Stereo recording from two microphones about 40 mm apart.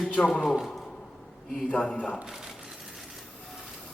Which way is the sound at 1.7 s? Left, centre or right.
Left.